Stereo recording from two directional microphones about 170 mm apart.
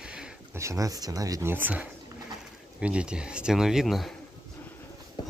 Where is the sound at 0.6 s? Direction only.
20° right (ahead or behind); by 4.1 s centre (ahead or behind).